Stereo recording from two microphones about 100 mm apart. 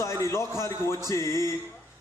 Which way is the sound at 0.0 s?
30° left (ahead or behind).